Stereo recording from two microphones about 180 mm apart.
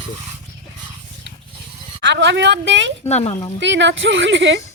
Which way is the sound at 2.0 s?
80° right.